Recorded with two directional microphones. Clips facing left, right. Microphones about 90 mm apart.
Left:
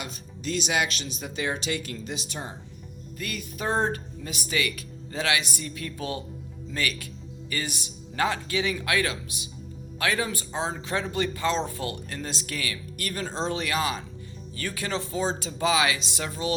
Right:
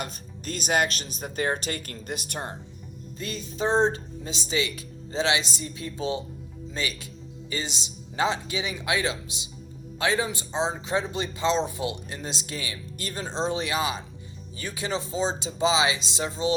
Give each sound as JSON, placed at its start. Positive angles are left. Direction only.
{"t": 0.0, "sound": "speech", "side_deg": -45}
{"t": 3.2, "sound": "speech", "side_deg": -25}